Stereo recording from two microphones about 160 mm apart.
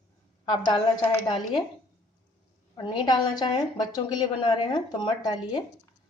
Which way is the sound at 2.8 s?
30° left (ahead or behind).